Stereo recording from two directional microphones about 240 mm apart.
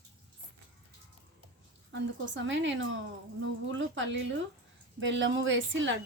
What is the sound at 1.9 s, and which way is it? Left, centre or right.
A woman's voice, right.